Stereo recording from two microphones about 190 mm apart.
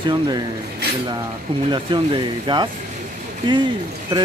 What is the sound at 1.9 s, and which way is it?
Speech, 25° right (ahead or behind).